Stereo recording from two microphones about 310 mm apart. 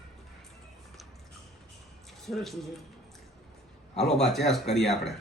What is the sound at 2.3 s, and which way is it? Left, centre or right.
Speech, centre.